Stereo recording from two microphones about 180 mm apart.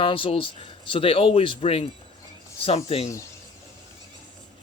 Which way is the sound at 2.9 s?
35° left (ahead or behind).